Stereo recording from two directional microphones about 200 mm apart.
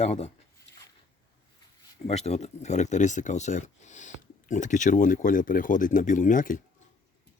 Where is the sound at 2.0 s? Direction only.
30° left (ahead or behind).